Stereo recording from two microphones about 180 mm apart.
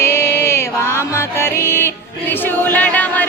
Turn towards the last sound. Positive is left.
turn(degrees=10)  # may be behind; listen again after turning